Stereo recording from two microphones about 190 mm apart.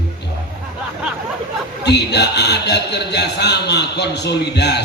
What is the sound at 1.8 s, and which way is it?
A man's voice, 60° left (ahead or behind).